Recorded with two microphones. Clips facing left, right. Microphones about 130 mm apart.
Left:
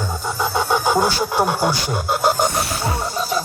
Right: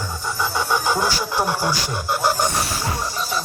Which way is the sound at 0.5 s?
55° left (ahead or behind).